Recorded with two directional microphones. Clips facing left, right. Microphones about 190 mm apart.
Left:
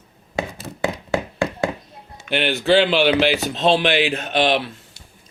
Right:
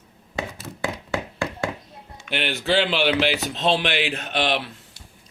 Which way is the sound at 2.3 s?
55° left (ahead or behind).